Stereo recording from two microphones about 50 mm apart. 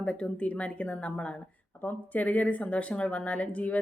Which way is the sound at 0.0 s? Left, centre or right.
Left.